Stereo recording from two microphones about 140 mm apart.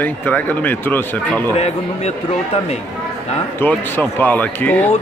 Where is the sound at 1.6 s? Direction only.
50° left (ahead or behind).